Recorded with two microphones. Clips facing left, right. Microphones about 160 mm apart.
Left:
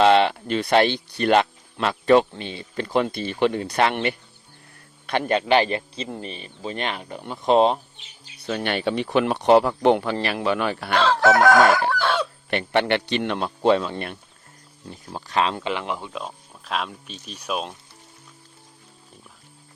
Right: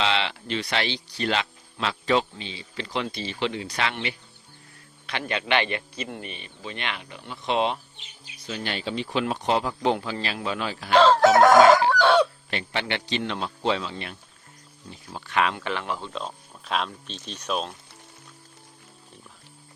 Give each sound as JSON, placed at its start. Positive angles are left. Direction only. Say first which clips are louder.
{"t": 0.0, "sound": "a man's voice", "louder": "left 10 dB", "side_deg": 50}
{"t": 8.4, "sound": "speech", "louder": "left 7 dB", "side_deg": 60}
{"t": 11.7, "sound": "chicken", "louder": "right 3 dB", "side_deg": -20}
{"t": 12.5, "sound": "speech", "louder": "left 8 dB", "side_deg": 60}
{"t": 14.8, "sound": "a man's voice", "louder": "left 4 dB", "side_deg": 40}
{"t": 15.6, "sound": "speech", "louder": "left 3 dB", "side_deg": 15}